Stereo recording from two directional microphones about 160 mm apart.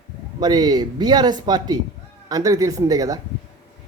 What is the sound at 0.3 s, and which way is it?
Speech, 25° right (ahead or behind).